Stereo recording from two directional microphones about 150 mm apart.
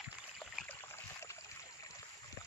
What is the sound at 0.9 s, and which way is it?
Boat, 20° left (ahead or behind).